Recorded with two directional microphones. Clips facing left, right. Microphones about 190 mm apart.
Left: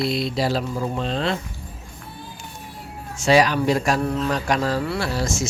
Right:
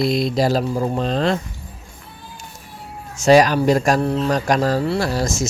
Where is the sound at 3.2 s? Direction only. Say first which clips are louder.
Right 4 dB; 45° right (ahead or behind).